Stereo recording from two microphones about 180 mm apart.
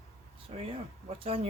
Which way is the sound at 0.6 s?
30° right (ahead or behind).